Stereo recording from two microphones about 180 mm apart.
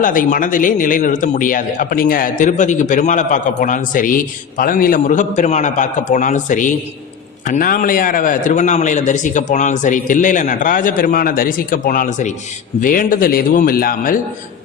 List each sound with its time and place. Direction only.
0.0 s speech: 50° left (ahead or behind)